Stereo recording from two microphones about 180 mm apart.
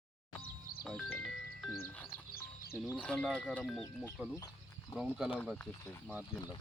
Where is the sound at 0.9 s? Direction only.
5° left (ahead or behind).